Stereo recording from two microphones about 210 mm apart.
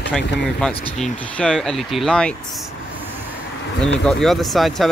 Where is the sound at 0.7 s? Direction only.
25° left (ahead or behind).